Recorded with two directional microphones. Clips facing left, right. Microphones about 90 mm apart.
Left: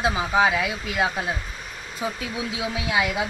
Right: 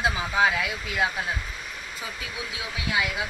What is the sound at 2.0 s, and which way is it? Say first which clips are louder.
Speech: left 10 dB; 30° left (ahead or behind).